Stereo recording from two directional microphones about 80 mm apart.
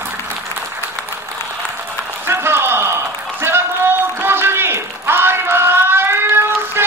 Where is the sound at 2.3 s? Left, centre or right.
Right.